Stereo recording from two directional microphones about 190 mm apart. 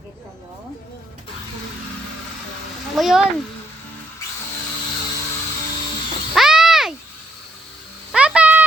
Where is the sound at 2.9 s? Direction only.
Centre (ahead or behind).